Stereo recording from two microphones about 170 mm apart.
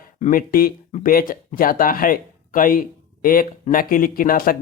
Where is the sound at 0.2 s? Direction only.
55° left (ahead or behind).